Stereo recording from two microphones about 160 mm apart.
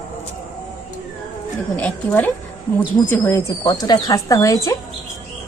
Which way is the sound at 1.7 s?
10° left (ahead or behind).